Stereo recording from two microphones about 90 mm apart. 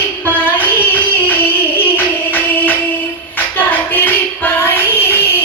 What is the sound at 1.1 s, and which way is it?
Music, 20° left (ahead or behind).